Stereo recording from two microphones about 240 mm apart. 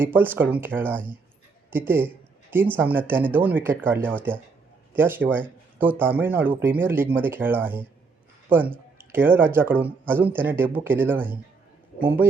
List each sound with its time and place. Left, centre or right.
0.0 s speech: centre